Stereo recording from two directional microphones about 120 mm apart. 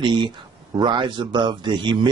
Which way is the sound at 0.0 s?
40° right (ahead or behind).